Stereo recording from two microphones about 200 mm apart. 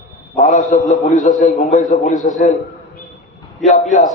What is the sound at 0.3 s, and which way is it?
A man's voice, 40° left (ahead or behind).